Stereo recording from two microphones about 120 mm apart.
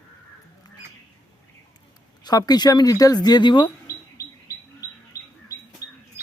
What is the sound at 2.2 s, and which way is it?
Speech, 35° left (ahead or behind).